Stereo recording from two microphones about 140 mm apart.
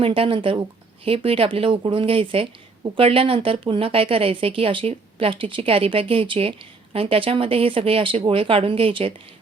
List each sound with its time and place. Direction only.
0.0 s speech: 40° right (ahead or behind)